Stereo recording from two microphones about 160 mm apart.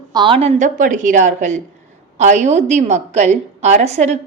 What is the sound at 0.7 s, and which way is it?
A woman's voice, 55° right (ahead or behind).